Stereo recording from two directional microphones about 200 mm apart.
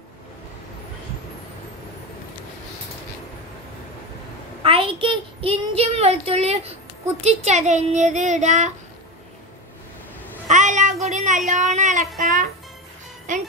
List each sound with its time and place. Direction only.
4.6 s a child's voice: 25° right (ahead or behind)
10.5 s a sound: 40° right (ahead or behind)
11.1 s a woman's voice: 35° right (ahead or behind)
13.3 s a child's voice: 40° right (ahead or behind)